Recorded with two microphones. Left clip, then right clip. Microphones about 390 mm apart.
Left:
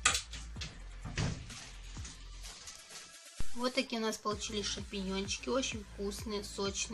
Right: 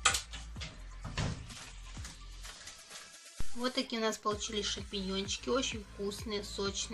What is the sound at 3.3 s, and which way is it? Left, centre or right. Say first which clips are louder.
Speech: left 1 dB; centre.